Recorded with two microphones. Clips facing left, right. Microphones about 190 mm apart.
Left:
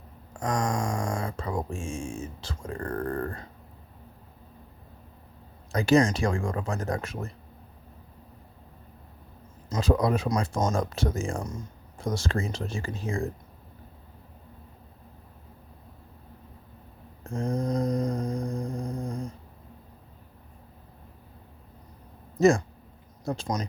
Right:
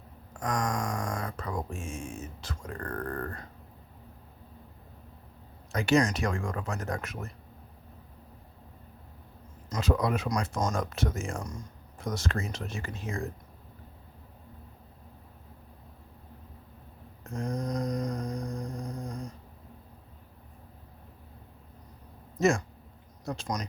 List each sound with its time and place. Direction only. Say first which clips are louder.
0.3 s speech: left 3 dB; 30° left (ahead or behind)
5.7 s speech: left 4 dB; 35° left (ahead or behind)
9.6 s speech: left 4 dB; 30° left (ahead or behind)
17.2 s mantra: left 4 dB; 30° left (ahead or behind)
18.5 s a sound: left 5 dB; 30° left (ahead or behind)
22.4 s speech: left 5 dB; 35° left (ahead or behind)